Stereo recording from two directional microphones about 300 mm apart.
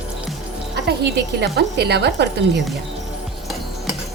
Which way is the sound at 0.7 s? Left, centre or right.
Right.